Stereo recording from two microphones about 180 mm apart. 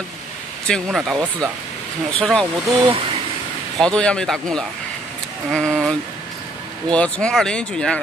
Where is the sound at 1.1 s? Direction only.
20° right (ahead or behind).